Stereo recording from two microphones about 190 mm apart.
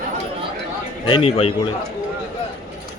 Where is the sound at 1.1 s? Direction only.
25° left (ahead or behind).